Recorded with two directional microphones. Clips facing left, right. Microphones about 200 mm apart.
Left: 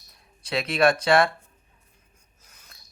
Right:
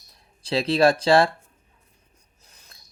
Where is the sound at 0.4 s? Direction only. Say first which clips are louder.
Right 3 dB; 30° right (ahead or behind).